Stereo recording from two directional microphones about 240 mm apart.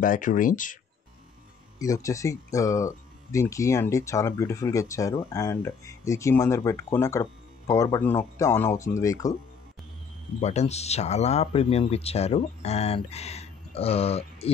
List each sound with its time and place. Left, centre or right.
0.0 s speech: left
1.8 s speech: centre
10.4 s speech: left